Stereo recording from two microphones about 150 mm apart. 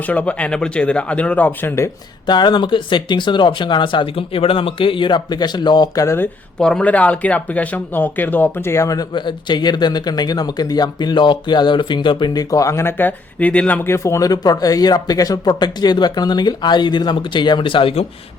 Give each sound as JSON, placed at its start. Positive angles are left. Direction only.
{"t": 0.0, "sound": "speech", "side_deg": 10}
{"t": 2.2, "sound": "speech", "side_deg": 30}
{"t": 6.6, "sound": "speech", "side_deg": 5}